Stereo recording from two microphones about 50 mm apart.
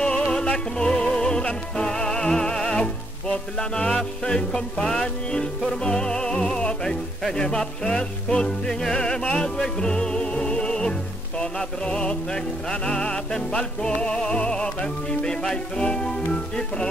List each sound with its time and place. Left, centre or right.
0.0 s music: centre